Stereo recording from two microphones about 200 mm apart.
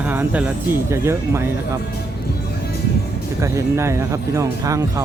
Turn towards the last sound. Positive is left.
turn(degrees=-15)  # may be behind; listen again after turning